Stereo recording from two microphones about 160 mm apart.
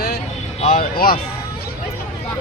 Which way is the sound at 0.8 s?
65° left (ahead or behind).